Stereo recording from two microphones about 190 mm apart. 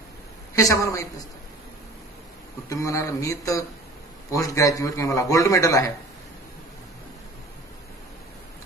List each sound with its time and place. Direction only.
0.6 s a man's voice: 15° left (ahead or behind)
2.7 s a man's voice: 15° left (ahead or behind)